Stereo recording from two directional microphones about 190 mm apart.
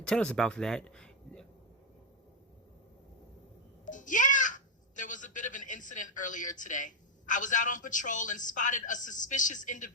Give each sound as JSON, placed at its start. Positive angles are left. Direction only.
{"t": 0.0, "sound": "speech", "side_deg": 5}
{"t": 3.8, "sound": "a child's voice", "side_deg": 40}